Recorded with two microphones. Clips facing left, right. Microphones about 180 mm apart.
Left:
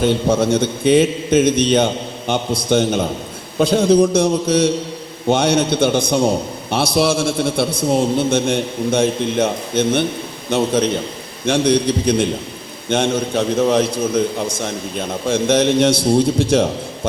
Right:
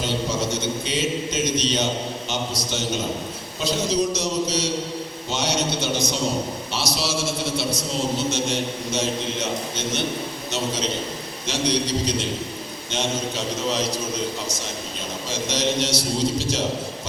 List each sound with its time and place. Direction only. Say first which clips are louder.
0.0 s a man's voice: left 9 dB; 55° left (ahead or behind)